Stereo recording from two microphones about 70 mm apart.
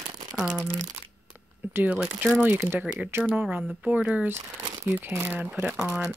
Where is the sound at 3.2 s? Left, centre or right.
Right.